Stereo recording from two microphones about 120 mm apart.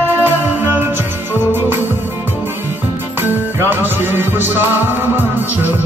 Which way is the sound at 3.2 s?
15° right (ahead or behind).